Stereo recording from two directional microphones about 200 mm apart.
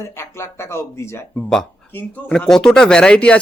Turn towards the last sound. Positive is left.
turn(degrees=5)  # may be behind; listen again after turning